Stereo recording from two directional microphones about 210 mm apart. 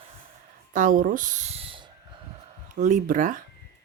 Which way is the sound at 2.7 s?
35° right (ahead or behind).